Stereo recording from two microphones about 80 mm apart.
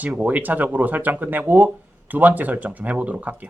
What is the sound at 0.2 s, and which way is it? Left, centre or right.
Speech, centre.